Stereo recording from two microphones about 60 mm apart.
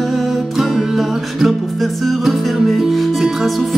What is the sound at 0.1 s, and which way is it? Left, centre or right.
Music, centre.